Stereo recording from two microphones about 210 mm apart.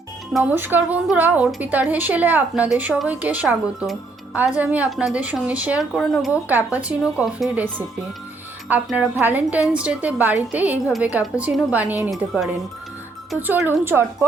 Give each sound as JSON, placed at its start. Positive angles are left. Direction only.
{"t": 0.3, "sound": "a woman's voice", "side_deg": -10}
{"t": 8.7, "sound": "a woman's voice", "side_deg": -5}